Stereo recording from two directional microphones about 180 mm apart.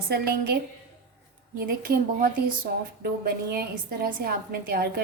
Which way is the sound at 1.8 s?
55° right (ahead or behind).